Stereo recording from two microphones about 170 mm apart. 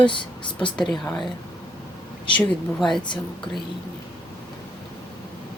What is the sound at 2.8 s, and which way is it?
Speech, centre (ahead or behind).